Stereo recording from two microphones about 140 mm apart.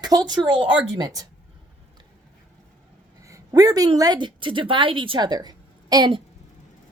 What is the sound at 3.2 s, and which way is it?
A woman's voice, 25° right (ahead or behind).